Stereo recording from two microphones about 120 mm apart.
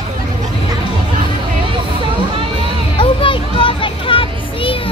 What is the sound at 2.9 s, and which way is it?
Music, 45° left (ahead or behind).